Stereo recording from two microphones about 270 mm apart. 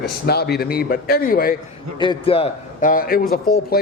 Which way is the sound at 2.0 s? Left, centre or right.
Centre.